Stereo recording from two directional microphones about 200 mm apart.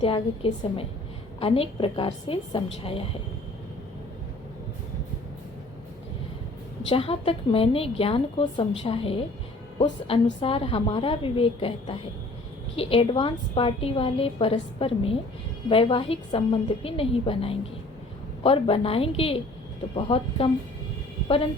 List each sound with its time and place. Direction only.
0.0 s a woman's voice: 30° left (ahead or behind)
6.9 s a woman's voice: 30° left (ahead or behind)